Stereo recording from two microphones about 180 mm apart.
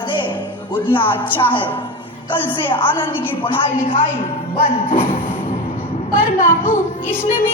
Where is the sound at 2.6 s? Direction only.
30° left (ahead or behind).